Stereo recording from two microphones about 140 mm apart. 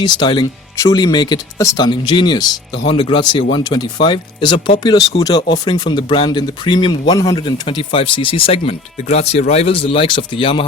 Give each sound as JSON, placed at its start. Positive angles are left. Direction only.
{"t": 0.0, "sound": "speech", "side_deg": 30}
{"t": 7.4, "sound": "speech", "side_deg": 35}